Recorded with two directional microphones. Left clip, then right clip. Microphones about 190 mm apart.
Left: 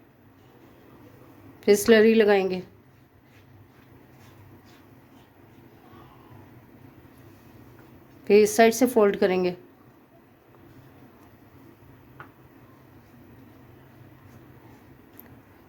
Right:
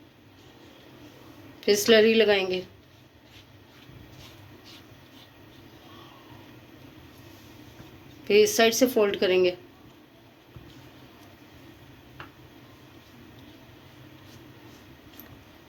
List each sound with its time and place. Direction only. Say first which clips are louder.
1.6 s speech: left 2 dB; 60° left (ahead or behind)
8.2 s speech: left 2 dB; 55° left (ahead or behind)